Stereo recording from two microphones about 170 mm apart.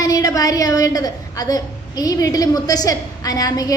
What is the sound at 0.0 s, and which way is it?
A woman's voice, 20° left (ahead or behind).